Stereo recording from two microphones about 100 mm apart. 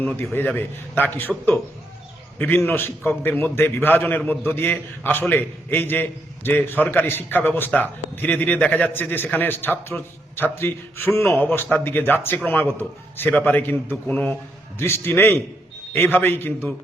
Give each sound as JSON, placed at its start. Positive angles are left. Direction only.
{"t": 0.0, "sound": "a man's voice", "side_deg": 20}
{"t": 2.6, "sound": "a man's voice", "side_deg": 20}
{"t": 14.8, "sound": "a man's voice", "side_deg": 25}